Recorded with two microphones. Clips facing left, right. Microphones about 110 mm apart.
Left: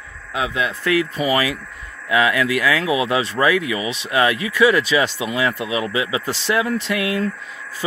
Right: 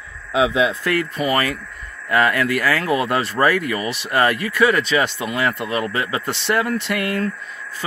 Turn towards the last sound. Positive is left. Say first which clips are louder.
# left 1 dB
turn(degrees=0)  # may be behind; listen again after turning